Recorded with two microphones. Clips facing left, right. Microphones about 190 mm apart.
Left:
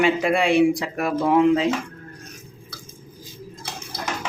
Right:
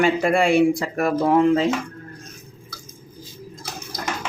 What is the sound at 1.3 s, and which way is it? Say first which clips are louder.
Speech: left 1 dB; 40° right (ahead or behind).